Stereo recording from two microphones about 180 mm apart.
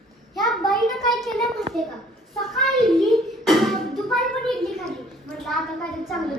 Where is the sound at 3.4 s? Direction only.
Centre (ahead or behind).